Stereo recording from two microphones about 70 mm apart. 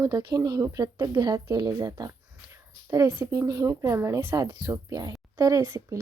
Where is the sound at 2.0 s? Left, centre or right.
Right.